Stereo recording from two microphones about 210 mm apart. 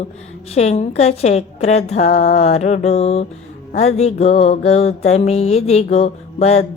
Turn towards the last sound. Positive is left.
turn(degrees=30)  # may be behind; listen again after turning